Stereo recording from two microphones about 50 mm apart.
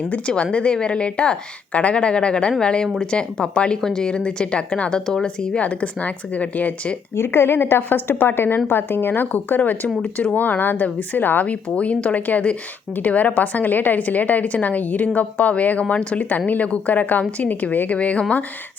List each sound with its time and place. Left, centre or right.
0.1 s a woman's voice: left
5.6 s a woman's voice: left
7.2 s a woman's voice: left
11.7 s a woman's voice: left